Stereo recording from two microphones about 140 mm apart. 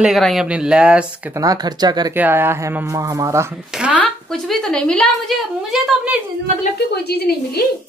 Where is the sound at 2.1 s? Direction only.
15° right (ahead or behind).